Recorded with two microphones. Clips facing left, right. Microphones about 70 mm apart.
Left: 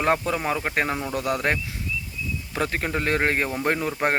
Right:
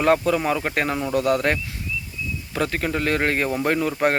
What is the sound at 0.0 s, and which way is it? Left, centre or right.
Speech, centre.